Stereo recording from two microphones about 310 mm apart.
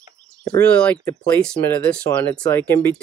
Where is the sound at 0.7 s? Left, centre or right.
Centre.